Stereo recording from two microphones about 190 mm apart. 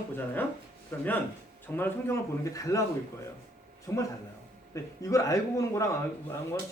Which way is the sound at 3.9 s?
15° left (ahead or behind).